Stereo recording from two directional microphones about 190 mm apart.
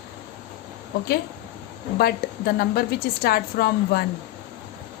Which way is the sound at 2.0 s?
55° left (ahead or behind).